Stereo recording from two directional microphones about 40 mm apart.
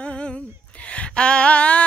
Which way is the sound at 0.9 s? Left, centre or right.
Left.